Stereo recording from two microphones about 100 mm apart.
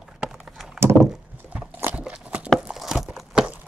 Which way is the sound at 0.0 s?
5° right (ahead or behind).